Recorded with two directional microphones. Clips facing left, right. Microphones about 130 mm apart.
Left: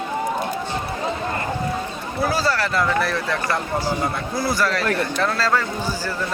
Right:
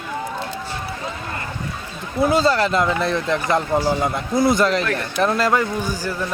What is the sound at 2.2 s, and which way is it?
A man's voice, 20° right (ahead or behind).